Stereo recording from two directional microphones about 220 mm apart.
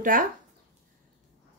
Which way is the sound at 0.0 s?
40° right (ahead or behind).